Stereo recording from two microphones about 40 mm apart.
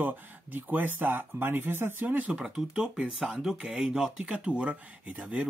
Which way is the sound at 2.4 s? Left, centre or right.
Centre.